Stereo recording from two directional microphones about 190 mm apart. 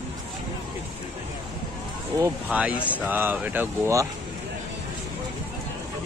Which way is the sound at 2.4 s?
5° right (ahead or behind).